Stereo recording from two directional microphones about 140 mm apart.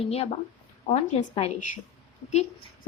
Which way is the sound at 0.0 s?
45° left (ahead or behind).